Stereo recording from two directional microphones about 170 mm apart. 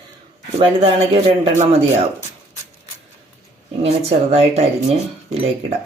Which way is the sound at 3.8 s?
35° right (ahead or behind).